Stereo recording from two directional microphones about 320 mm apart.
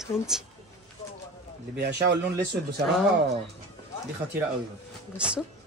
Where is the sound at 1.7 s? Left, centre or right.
Right.